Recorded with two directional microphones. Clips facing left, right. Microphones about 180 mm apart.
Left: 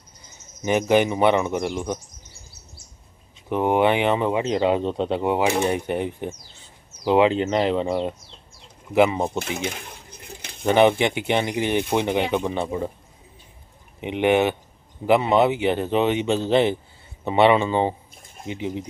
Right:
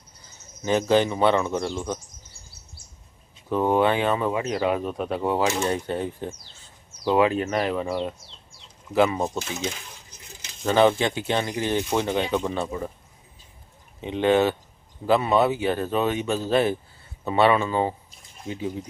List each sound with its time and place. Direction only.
0.3 s speech: 15° left (ahead or behind)
3.5 s speech: 20° left (ahead or behind)
9.4 s coin: 60° left (ahead or behind)
10.7 s speech: 15° left (ahead or behind)
14.0 s speech: 15° left (ahead or behind)